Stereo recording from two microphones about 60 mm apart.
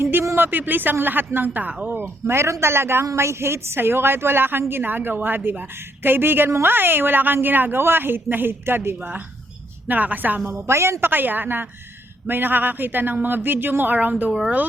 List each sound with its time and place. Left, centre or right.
0.0 s a sound: right
0.3 s a woman's voice: right
2.2 s a man's voice: right
9.8 s a woman's voice: right
10.4 s a man's voice: right
11.1 s a woman's voice: right